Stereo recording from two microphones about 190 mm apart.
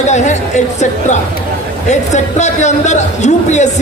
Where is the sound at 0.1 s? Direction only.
40° left (ahead or behind).